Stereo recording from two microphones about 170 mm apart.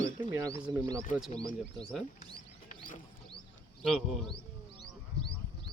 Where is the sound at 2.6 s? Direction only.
50° left (ahead or behind).